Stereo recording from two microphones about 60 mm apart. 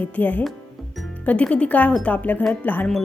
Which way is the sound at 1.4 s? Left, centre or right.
Centre.